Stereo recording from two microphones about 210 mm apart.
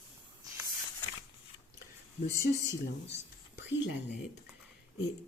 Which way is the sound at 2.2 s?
15° right (ahead or behind).